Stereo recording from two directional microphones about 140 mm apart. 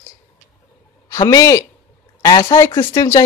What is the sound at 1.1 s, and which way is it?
A woman's voice, 25° left (ahead or behind).